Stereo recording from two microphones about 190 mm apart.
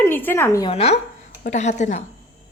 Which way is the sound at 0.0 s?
10° left (ahead or behind).